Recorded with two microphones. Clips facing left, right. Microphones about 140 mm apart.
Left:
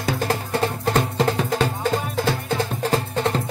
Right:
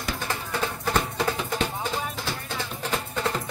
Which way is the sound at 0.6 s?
30° left (ahead or behind).